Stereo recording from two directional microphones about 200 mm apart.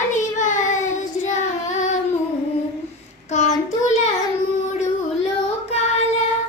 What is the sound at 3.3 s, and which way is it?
Child singing, 35° left (ahead or behind).